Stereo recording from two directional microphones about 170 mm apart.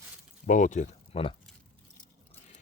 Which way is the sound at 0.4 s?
50° left (ahead or behind).